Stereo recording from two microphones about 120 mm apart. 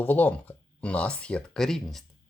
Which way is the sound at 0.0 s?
15° left (ahead or behind).